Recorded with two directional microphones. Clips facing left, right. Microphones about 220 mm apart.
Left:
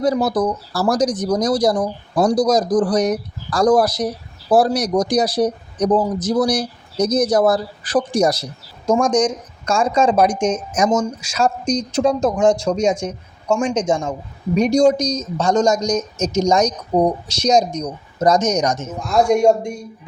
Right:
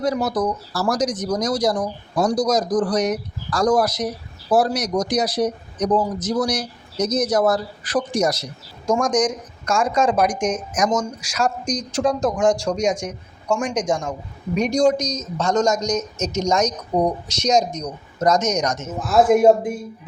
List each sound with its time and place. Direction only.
0.0 s speech: 30° left (ahead or behind)
18.9 s speech: 5° right (ahead or behind)